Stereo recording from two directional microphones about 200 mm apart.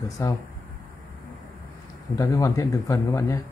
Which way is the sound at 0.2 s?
15° left (ahead or behind).